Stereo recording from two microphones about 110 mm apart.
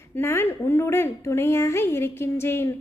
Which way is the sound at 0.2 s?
20° left (ahead or behind).